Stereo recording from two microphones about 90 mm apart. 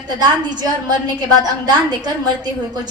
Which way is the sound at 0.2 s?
50° right (ahead or behind).